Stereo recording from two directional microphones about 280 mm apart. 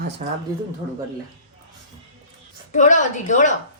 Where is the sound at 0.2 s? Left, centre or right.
Right.